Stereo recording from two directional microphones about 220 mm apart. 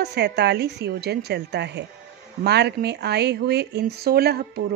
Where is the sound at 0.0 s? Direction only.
50° right (ahead or behind).